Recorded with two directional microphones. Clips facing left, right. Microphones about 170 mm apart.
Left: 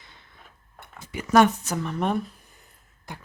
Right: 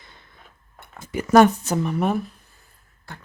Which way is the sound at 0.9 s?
45° right (ahead or behind).